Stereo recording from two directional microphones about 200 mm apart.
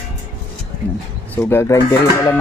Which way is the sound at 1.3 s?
10° left (ahead or behind).